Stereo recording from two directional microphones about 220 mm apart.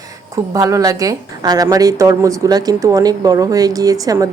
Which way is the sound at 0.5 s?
15° right (ahead or behind).